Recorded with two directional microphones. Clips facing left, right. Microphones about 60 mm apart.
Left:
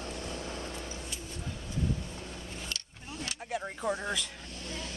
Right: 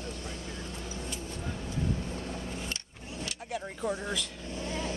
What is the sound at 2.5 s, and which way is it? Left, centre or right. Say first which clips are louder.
Vehicle: right 3 dB; right.